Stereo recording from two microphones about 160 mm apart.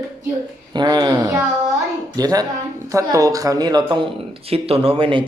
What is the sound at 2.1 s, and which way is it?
Speech, 20° right (ahead or behind).